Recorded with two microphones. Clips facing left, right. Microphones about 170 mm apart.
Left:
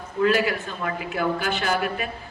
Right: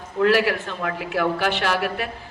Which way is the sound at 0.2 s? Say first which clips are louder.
Right 2 dB; 70° right (ahead or behind).